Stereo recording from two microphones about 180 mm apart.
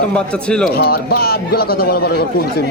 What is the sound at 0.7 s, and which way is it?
A man's voice, 60° left (ahead or behind).